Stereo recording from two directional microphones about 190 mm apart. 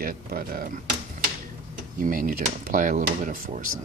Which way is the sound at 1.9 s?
45° right (ahead or behind).